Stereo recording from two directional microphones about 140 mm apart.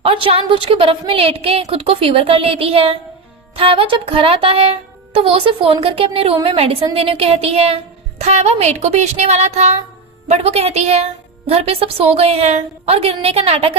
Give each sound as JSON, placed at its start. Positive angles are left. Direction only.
{"t": 0.0, "sound": "music", "side_deg": -40}